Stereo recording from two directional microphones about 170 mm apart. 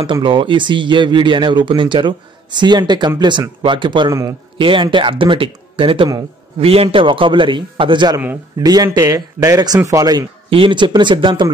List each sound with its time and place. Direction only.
0.0 s speech: 30° right (ahead or behind)
4.6 s speech: 30° right (ahead or behind)